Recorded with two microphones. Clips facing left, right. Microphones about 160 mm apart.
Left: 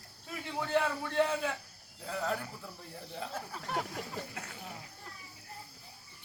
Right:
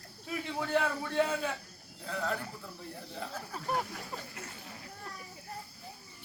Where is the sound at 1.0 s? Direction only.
10° right (ahead or behind).